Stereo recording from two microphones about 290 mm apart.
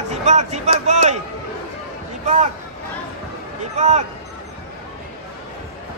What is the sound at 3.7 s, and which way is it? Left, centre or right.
Speech, right.